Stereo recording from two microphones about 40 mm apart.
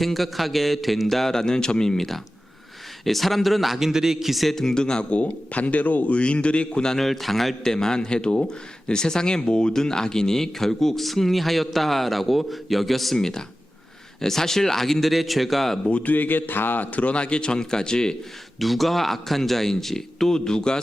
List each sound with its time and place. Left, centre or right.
0.0 s speech: centre
1.1 s speech: centre
4.5 s a man's voice: centre
5.1 s speech: left
6.1 s a man's voice: left
6.9 s speech: centre
7.6 s speech: centre
13.1 s speech: centre
15.9 s speech: left
16.1 s a man's voice: left; by 18.2 s centre
18.6 s speech: centre